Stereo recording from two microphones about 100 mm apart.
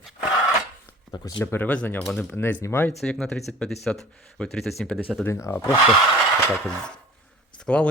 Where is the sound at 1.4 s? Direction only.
25° left (ahead or behind); by 2.3 s 5° left (ahead or behind).